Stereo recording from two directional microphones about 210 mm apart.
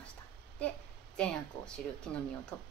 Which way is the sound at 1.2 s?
5° left (ahead or behind).